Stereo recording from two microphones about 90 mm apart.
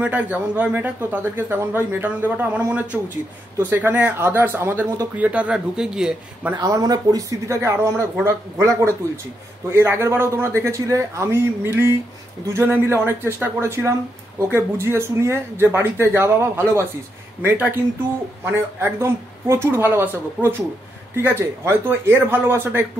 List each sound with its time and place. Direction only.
0.0 s speech: 15° right (ahead or behind)
6.5 s speech: 45° right (ahead or behind); by 22.8 s 25° right (ahead or behind)